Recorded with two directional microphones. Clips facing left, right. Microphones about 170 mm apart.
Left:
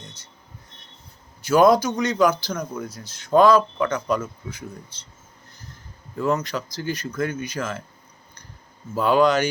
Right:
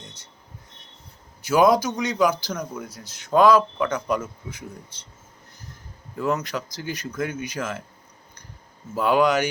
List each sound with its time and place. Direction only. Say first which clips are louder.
1.5 s speech: left 2 dB; 10° right (ahead or behind)
6.1 s speech: left 2 dB; 5° right (ahead or behind)
9.0 s speech: left 1 dB; 10° right (ahead or behind)